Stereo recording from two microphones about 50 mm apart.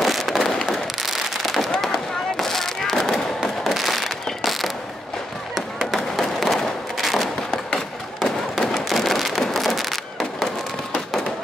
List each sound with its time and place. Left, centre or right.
0.0 s fireworks: centre
0.4 s fireworks: centre
1.0 s fireworks: centre
3.6 s a sound: centre
5.5 s fireworks: centre
5.9 s thump: centre
8.2 s fireworks: centre
9.4 s a sound: centre